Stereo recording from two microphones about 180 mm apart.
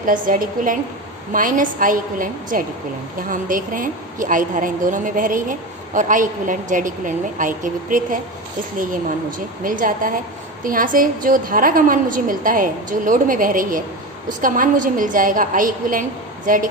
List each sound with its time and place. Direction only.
0.0 s a woman's voice: 50° right (ahead or behind)